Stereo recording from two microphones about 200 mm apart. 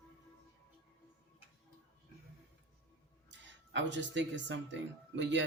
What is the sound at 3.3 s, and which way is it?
Speech, 65° right (ahead or behind).